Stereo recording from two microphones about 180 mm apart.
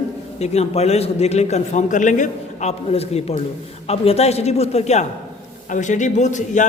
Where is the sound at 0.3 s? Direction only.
35° left (ahead or behind).